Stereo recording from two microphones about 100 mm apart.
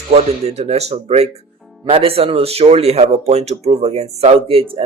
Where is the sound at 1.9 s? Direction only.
75° right (ahead or behind).